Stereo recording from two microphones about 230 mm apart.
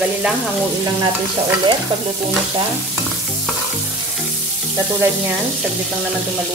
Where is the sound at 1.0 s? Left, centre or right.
Centre.